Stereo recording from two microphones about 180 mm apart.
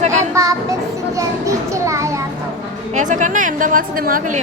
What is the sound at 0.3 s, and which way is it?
Children playing, 15° right (ahead or behind).